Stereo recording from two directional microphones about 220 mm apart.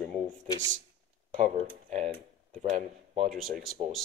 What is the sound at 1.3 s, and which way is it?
Speech, 35° right (ahead or behind).